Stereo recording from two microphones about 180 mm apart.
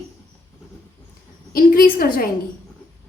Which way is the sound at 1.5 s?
50° left (ahead or behind).